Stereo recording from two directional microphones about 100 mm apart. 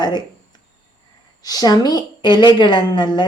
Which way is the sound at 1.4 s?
40° left (ahead or behind).